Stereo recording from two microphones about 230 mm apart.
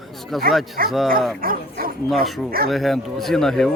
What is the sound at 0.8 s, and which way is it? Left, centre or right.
Speech, right.